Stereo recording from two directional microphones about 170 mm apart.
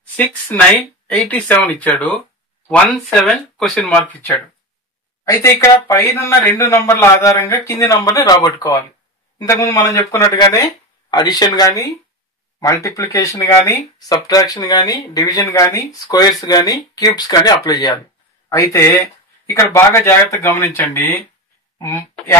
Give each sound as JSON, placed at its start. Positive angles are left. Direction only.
{"t": 0.1, "sound": "speech", "side_deg": 10}